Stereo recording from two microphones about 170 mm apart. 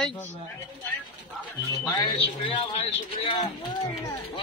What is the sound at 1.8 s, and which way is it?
Speech, 20° left (ahead or behind).